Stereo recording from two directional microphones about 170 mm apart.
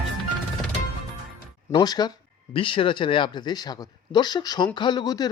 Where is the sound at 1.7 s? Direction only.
25° left (ahead or behind).